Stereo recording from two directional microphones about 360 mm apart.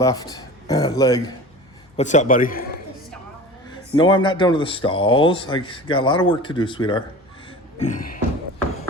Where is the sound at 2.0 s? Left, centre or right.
Centre.